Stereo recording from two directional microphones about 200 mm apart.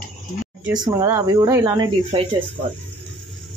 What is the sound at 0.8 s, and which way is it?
Speech, 20° right (ahead or behind).